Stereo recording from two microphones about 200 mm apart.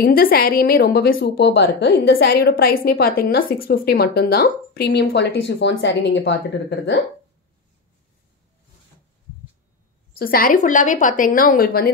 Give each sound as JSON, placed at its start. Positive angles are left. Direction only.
{"t": 0.0, "sound": "a woman's voice", "side_deg": 45}
{"t": 10.1, "sound": "a woman's voice", "side_deg": 45}